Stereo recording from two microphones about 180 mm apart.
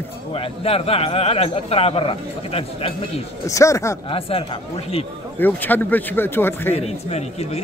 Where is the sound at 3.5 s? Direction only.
15° left (ahead or behind).